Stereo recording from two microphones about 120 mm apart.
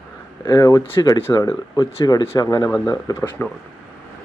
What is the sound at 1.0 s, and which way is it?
Speech, 30° left (ahead or behind).